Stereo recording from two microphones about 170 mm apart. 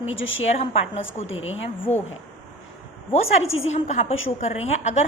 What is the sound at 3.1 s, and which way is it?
A woman's voice, 40° left (ahead or behind).